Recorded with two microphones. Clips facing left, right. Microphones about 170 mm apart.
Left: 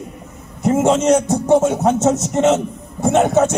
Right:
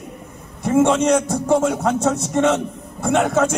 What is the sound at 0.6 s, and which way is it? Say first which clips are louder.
A man's voice: left 1 dB; 25° left (ahead or behind).